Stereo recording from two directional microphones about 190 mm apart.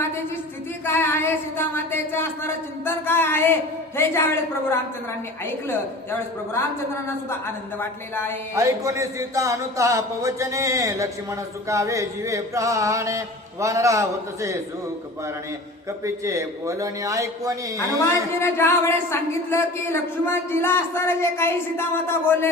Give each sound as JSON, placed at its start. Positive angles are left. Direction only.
{"t": 0.9, "sound": "speech", "side_deg": 10}
{"t": 7.8, "sound": "speech", "side_deg": 10}
{"t": 8.5, "sound": "speech", "side_deg": -15}
{"t": 16.0, "sound": "speech", "side_deg": -15}
{"t": 17.7, "sound": "speech", "side_deg": 15}